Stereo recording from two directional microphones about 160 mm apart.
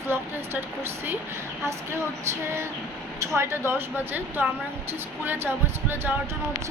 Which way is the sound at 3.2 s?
15° right (ahead or behind).